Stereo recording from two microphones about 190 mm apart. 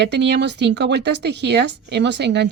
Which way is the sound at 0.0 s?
65° right (ahead or behind).